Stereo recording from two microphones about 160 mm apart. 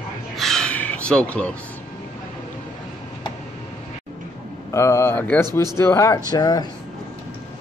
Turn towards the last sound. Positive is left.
turn(degrees=25)  # may be behind; listen again after turning